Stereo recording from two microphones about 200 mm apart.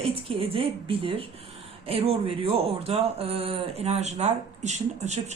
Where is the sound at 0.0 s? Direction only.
30° right (ahead or behind).